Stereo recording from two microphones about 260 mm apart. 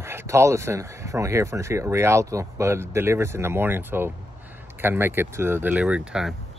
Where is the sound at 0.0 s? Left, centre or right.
Centre.